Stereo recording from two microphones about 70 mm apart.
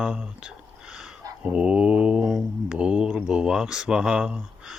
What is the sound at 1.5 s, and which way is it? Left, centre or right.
Mantra, centre.